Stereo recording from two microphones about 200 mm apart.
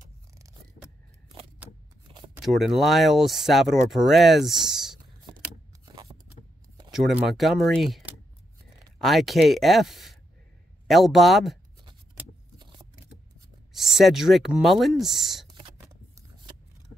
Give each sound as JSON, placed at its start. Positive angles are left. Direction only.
{"t": 1.6, "sound": "a sound", "side_deg": -5}
{"t": 2.3, "sound": "speech", "side_deg": 0}
{"t": 5.9, "sound": "scrape", "side_deg": -20}
{"t": 6.9, "sound": "speech", "side_deg": 0}
{"t": 12.5, "sound": "a sound", "side_deg": -20}
{"t": 13.7, "sound": "speech", "side_deg": 0}